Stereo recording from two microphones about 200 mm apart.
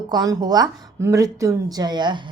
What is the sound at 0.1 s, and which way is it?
A woman's voice, 20° right (ahead or behind).